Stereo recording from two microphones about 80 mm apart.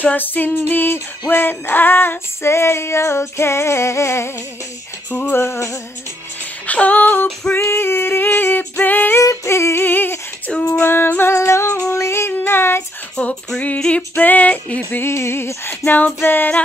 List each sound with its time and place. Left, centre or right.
0.0 s female singing: left
5.3 s female singing: left
6.6 s female singing: centre
9.2 s female singing: left
10.5 s female singing: centre
10.9 s music: left
11.3 s female singing: left
13.1 s female singing: centre; by 15.7 s left
15.8 s female singing: centre